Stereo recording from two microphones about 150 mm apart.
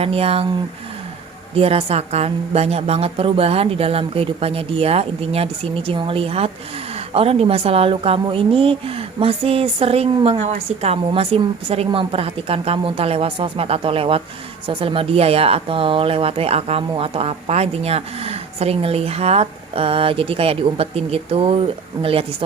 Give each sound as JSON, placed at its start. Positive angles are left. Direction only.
{"t": 0.0, "sound": "speech", "side_deg": -40}
{"t": 1.5, "sound": "speech", "side_deg": -40}